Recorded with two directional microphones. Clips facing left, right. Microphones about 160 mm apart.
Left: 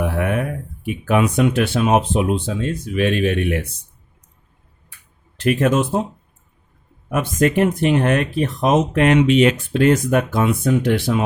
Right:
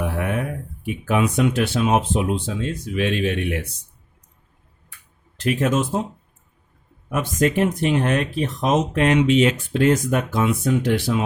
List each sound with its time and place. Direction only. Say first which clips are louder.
0.0 s a sound: left 3 dB; 65° left (ahead or behind)
0.9 s speech: left 3 dB; 60° left (ahead or behind)
5.4 s speech: left 4 dB; 65° left (ahead or behind)
7.1 s speech: left 3 dB; 55° left (ahead or behind)